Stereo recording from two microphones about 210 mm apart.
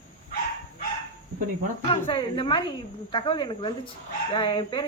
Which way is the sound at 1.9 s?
25° left (ahead or behind).